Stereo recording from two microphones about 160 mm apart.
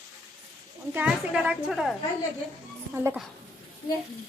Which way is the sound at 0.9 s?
10° right (ahead or behind).